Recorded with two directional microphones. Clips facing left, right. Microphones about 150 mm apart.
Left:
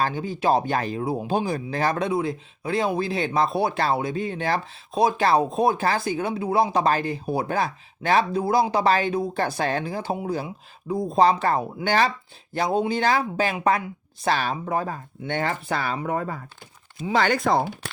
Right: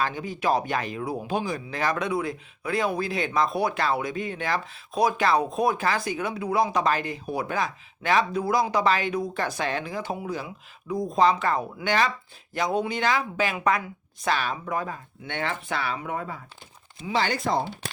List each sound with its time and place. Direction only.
0.0 s speech: 30° left (ahead or behind); by 17.6 s 60° left (ahead or behind)